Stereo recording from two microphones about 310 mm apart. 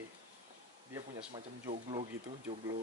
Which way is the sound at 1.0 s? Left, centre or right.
Centre.